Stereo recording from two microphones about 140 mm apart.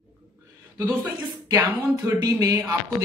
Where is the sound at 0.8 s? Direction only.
15° right (ahead or behind).